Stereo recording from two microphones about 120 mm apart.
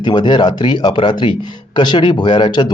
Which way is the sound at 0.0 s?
40° left (ahead or behind).